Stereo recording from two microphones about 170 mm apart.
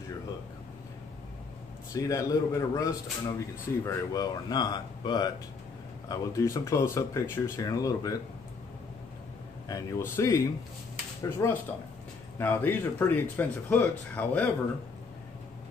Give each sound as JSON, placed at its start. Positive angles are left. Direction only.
{"t": 2.0, "sound": "speech", "side_deg": 20}
{"t": 9.7, "sound": "speech", "side_deg": 15}